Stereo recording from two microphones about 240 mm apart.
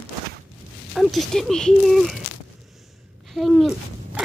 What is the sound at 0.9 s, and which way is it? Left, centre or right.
Speech, centre.